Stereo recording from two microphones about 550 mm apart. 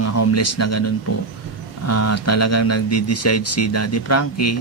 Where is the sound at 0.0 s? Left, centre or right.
Left.